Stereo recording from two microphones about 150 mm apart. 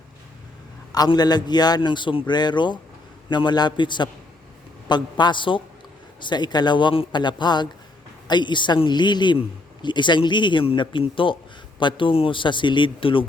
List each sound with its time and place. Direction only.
0.9 s a man's voice: 25° left (ahead or behind)